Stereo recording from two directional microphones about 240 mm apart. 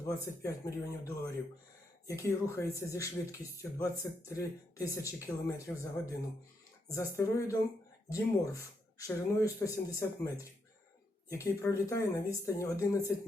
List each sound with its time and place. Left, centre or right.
0.0 s speech: centre
9.0 s speech: centre